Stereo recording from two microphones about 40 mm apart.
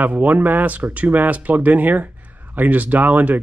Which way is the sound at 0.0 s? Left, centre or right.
Right.